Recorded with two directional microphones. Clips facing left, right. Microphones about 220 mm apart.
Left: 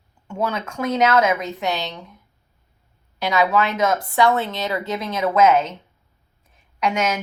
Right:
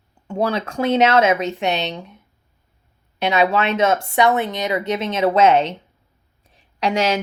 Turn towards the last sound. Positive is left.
turn(degrees=-30)  # may be behind; listen again after turning